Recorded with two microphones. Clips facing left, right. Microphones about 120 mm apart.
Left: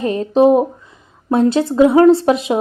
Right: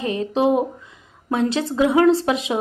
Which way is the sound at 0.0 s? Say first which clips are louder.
Left 7 dB; 40° left (ahead or behind).